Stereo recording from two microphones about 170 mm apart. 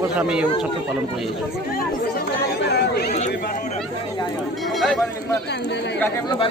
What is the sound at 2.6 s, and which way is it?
Chatter, 80° left.